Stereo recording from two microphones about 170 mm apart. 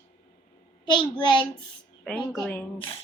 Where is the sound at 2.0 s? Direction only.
5° left (ahead or behind).